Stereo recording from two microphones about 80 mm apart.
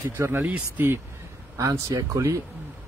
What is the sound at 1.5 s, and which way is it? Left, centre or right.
Speech, right.